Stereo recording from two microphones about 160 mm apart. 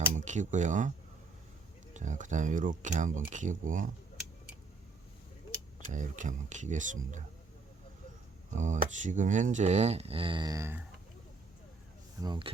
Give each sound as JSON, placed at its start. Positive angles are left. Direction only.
{"t": 0.1, "sound": "speech", "side_deg": -50}
{"t": 5.8, "sound": "speech", "side_deg": -50}
{"t": 8.4, "sound": "speech", "side_deg": -50}
{"t": 12.2, "sound": "speech", "side_deg": -25}